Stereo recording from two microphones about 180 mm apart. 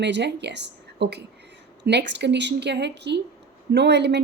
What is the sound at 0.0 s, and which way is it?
A woman's voice, 75° right (ahead or behind).